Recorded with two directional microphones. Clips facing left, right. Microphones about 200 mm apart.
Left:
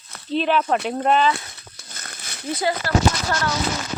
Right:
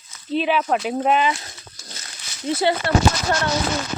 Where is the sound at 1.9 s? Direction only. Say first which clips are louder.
Left 5 dB; 55° left (ahead or behind).